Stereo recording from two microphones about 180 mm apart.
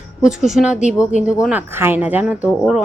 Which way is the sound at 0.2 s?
5° right (ahead or behind).